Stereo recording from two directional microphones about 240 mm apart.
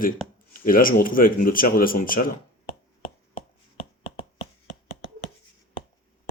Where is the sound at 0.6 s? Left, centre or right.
Left.